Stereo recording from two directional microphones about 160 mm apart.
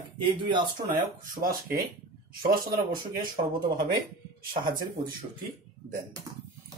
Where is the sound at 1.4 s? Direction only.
15° right (ahead or behind).